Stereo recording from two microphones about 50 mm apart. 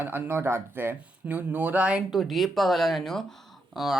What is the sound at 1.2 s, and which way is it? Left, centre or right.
Speech, right.